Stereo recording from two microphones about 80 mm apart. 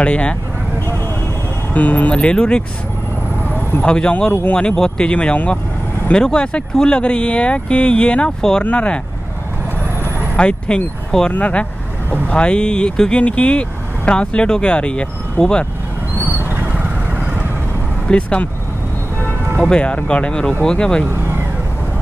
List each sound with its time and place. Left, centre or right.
0.0 s speech: centre
1.7 s speech: centre
3.4 s a sound: left
3.8 s speech: centre
10.3 s speech: centre
16.2 s a sound: right
18.0 s speech: centre
19.6 s speech: centre